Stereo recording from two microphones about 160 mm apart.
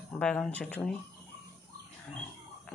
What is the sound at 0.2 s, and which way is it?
Speech, 5° left (ahead or behind).